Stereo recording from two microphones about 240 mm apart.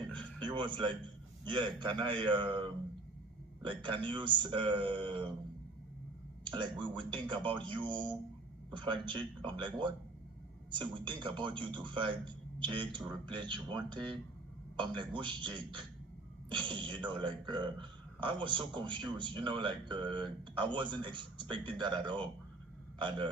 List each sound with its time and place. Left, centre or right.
0.2 s music: centre
1.5 s speech: centre
6.4 s speech: centre